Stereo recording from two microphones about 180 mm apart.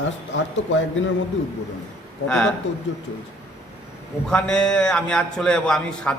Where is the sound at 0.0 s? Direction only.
90° left.